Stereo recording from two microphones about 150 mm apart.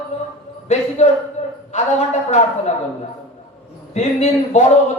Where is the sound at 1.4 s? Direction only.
50° left (ahead or behind).